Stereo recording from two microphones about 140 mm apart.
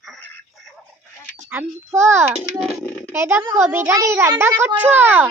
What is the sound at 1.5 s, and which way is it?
A child's voice, 20° right (ahead or behind).